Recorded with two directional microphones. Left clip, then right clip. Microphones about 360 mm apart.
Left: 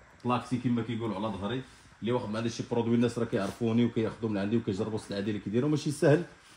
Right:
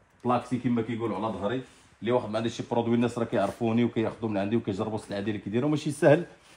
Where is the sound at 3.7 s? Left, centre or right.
Centre.